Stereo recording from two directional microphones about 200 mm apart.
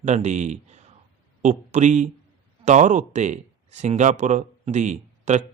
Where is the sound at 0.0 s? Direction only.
35° right (ahead or behind).